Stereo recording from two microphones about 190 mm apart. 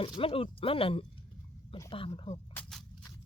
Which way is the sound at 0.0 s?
30° left (ahead or behind).